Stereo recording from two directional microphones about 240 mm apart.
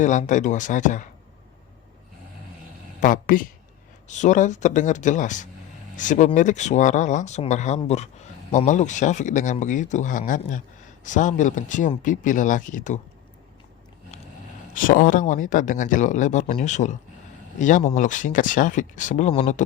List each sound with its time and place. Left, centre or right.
0.0 s speech: left
3.0 s speech: left
14.7 s speech: left